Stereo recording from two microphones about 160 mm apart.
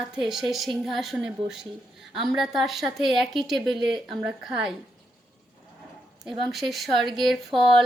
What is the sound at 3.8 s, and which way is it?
Speech, 30° right (ahead or behind).